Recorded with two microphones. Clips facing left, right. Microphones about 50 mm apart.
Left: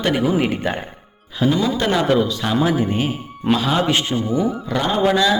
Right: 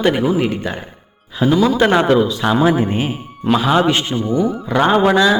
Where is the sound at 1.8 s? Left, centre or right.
Right.